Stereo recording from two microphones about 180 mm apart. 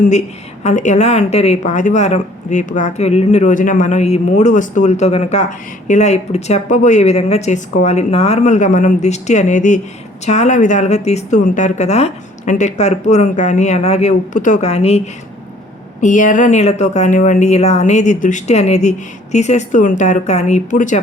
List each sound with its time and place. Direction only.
0.6 s a woman's voice: 40° left (ahead or behind)